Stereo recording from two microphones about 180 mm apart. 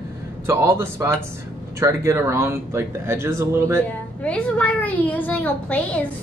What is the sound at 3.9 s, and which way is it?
A child's voice, 10° left (ahead or behind).